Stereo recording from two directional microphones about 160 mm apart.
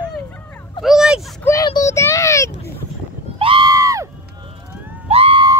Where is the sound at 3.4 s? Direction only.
35° right (ahead or behind).